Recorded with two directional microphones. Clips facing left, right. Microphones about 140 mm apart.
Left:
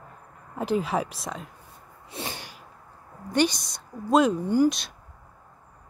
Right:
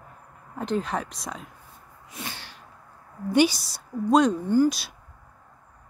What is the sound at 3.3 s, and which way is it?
Speech, 5° right (ahead or behind).